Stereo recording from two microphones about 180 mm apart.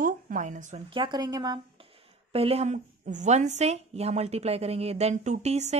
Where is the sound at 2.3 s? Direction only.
35° right (ahead or behind).